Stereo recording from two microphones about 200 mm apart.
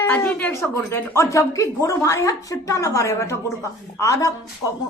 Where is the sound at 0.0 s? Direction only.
10° left (ahead or behind).